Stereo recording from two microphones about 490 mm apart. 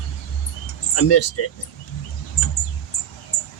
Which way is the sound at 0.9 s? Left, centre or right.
Left.